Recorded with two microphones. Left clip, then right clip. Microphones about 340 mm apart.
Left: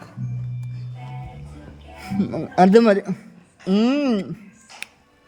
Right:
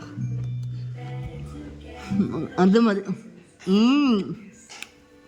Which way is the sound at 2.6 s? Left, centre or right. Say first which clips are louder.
Left 7 dB; centre.